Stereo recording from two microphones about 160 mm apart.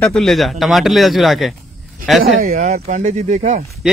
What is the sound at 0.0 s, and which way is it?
Speech, 5° left (ahead or behind).